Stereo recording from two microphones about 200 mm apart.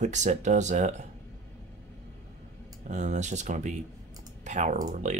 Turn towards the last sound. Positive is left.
turn(degrees=-35)  # may be behind; listen again after turning